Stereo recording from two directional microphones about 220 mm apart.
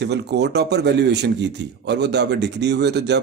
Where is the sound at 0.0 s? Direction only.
50° right (ahead or behind).